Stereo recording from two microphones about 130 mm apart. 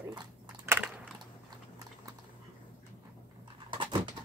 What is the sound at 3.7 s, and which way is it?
Dog, 40° right (ahead or behind).